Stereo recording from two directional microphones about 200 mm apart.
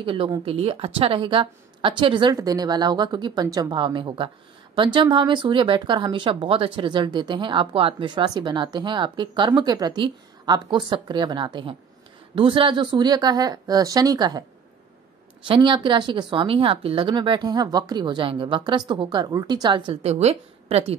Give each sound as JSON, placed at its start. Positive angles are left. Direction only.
{"t": 0.0, "sound": "speech", "side_deg": -25}
{"t": 15.4, "sound": "speech", "side_deg": -25}